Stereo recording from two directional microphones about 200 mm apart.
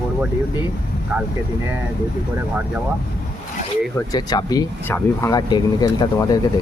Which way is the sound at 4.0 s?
20° left (ahead or behind).